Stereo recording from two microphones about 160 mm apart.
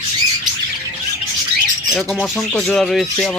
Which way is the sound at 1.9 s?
Centre (ahead or behind).